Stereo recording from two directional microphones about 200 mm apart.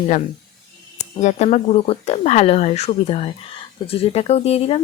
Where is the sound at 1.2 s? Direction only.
35° left (ahead or behind).